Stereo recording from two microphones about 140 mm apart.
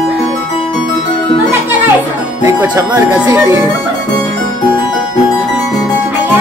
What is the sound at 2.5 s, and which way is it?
Speech, 15° right (ahead or behind).